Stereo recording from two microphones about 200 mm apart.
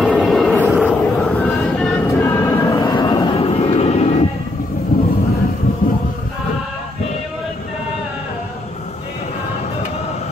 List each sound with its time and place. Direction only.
0.0 s music: centre (ahead or behind)
2.0 s train: 15° left (ahead or behind); by 4.2 s 30° left (ahead or behind)
4.9 s vehicle: 45° left (ahead or behind)